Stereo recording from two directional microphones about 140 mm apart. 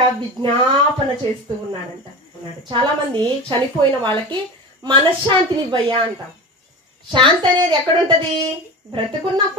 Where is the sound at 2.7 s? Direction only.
35° right (ahead or behind).